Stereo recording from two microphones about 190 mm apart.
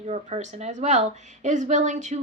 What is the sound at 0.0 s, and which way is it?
A woman's voice, 35° right (ahead or behind).